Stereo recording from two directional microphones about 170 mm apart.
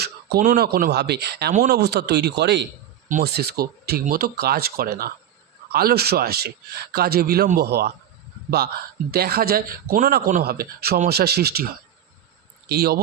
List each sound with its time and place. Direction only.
0.0 s speech: 65° right (ahead or behind); by 2.6 s 85° right
3.2 s a man's voice: 65° right (ahead or behind)